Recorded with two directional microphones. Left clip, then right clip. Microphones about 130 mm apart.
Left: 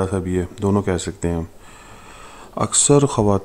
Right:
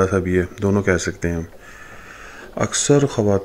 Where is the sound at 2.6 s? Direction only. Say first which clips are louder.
Left 1 dB; 20° left (ahead or behind).